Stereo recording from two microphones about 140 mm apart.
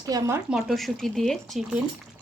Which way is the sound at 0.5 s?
Centre (ahead or behind).